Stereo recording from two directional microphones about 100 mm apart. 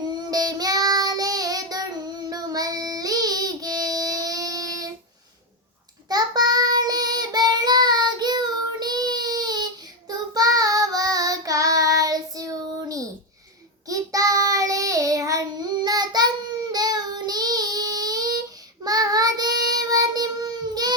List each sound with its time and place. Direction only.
0.3 s child singing: 40° right (ahead or behind)
6.1 s child singing: 40° right (ahead or behind)